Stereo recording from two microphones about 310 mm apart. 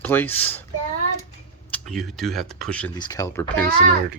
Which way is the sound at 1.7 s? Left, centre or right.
Centre.